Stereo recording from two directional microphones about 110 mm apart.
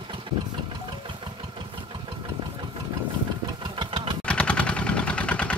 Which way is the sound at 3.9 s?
60° right (ahead or behind).